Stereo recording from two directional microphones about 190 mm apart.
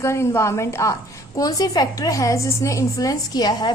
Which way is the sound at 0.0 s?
15° left (ahead or behind).